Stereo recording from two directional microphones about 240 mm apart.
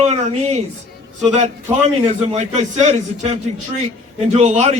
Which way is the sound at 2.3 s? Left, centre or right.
Right.